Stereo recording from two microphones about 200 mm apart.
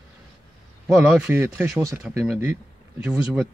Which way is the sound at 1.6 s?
15° right (ahead or behind).